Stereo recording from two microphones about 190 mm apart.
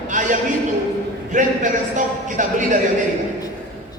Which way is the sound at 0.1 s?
40° right (ahead or behind).